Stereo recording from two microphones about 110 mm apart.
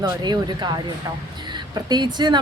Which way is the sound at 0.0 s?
40° right (ahead or behind).